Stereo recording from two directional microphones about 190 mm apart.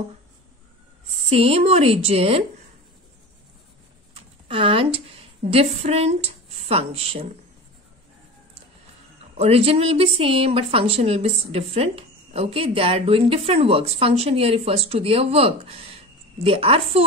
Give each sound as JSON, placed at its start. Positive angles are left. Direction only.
{"t": 1.1, "sound": "a woman's voice", "side_deg": -30}
{"t": 4.1, "sound": "speech", "side_deg": -30}
{"t": 9.4, "sound": "a woman's voice", "side_deg": -30}